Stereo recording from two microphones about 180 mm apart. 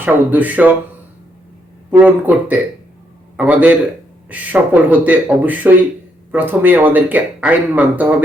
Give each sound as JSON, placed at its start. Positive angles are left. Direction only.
{"t": 0.0, "sound": "speech", "side_deg": -10}
{"t": 1.9, "sound": "speech", "side_deg": -10}